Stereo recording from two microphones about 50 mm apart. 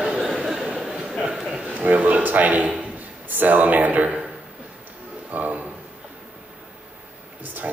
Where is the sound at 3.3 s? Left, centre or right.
Right.